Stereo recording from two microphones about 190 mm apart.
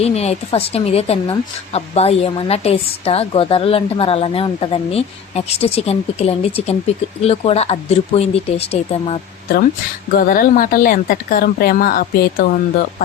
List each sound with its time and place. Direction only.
0.0 s speech: 35° left (ahead or behind)
10.2 s speech: 50° left (ahead or behind)